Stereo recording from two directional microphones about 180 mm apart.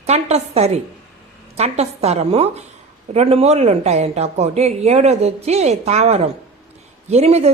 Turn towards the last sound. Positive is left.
turn(degrees=-35)  # may be behind; listen again after turning